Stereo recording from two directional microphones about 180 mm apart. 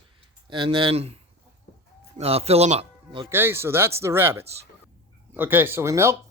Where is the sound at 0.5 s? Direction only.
25° right (ahead or behind).